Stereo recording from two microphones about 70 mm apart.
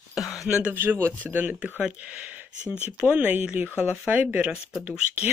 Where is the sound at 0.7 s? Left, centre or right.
Right.